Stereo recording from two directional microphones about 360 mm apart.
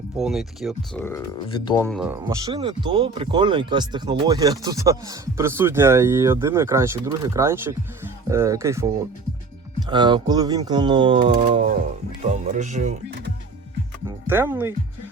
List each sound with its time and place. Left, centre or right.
0.2 s speech: centre
2.2 s speech: centre
14.3 s speech: centre